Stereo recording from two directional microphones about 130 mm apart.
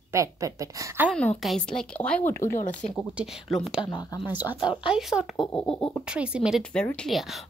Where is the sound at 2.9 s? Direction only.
Centre (ahead or behind).